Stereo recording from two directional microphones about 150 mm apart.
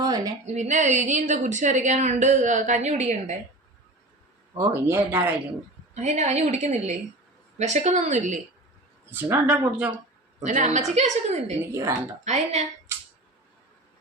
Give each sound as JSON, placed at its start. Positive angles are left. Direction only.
{"t": 0.0, "sound": "a sound", "side_deg": -25}
{"t": 0.4, "sound": "a woman's voice", "side_deg": -50}
{"t": 4.5, "sound": "speech", "side_deg": -15}
{"t": 5.9, "sound": "a woman's voice", "side_deg": -50}
{"t": 9.0, "sound": "speech", "side_deg": -15}
{"t": 10.4, "sound": "a woman's voice", "side_deg": -55}
{"t": 11.6, "sound": "speech", "side_deg": -15}
{"t": 12.2, "sound": "a woman's voice", "side_deg": -50}